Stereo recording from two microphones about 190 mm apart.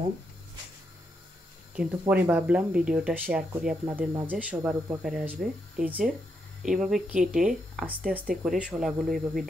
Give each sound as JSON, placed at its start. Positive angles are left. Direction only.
{"t": 1.8, "sound": "speech", "side_deg": -10}